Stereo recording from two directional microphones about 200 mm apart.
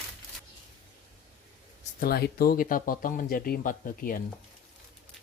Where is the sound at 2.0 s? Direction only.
50° left (ahead or behind).